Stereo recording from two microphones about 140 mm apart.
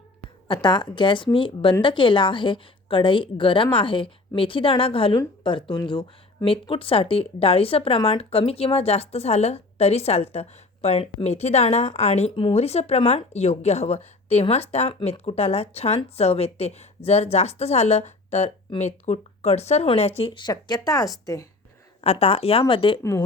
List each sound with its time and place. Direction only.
0.4 s a woman's voice: 35° left (ahead or behind)
22.0 s speech: 45° left (ahead or behind)